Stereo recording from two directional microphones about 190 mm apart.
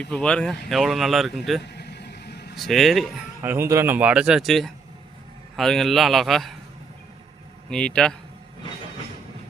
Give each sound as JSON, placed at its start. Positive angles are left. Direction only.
{"t": 0.0, "sound": "speech", "side_deg": 5}
{"t": 1.6, "sound": "vehicle", "side_deg": 60}
{"t": 2.6, "sound": "speech", "side_deg": 0}
{"t": 3.4, "sound": "speech", "side_deg": -10}
{"t": 7.7, "sound": "speech", "side_deg": 5}